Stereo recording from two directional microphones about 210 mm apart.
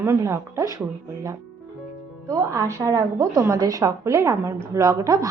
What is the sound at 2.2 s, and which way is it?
A woman's voice, 15° right (ahead or behind).